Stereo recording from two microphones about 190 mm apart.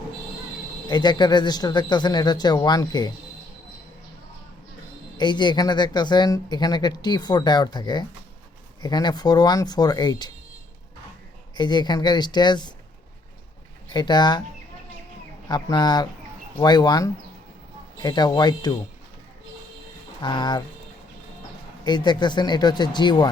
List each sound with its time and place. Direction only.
0.9 s speech: 25° left (ahead or behind)
5.1 s speech: 25° left (ahead or behind)
11.5 s speech: 20° left (ahead or behind)
13.9 s speech: 20° left (ahead or behind)
15.4 s speech: 20° left (ahead or behind)
20.2 s speech: 25° left (ahead or behind)
21.8 s speech: 25° left (ahead or behind)